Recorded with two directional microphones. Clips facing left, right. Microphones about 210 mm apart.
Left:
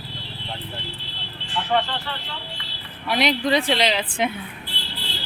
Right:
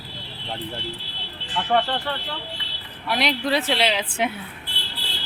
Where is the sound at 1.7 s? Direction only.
50° right (ahead or behind).